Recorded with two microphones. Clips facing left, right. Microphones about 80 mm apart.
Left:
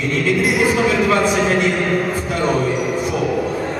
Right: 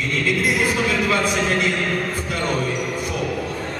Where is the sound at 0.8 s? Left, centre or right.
Centre.